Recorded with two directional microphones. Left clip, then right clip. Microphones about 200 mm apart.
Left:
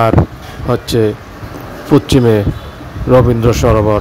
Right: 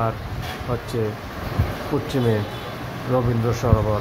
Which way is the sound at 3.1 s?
45° left (ahead or behind).